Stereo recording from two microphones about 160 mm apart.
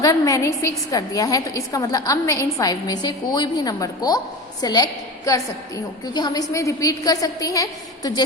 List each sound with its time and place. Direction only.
0.0 s a woman's voice: 20° left (ahead or behind)